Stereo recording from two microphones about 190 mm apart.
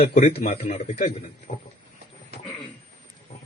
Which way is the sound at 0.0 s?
35° left (ahead or behind).